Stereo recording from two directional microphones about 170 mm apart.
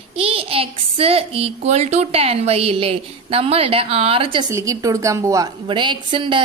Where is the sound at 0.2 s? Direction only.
35° right (ahead or behind).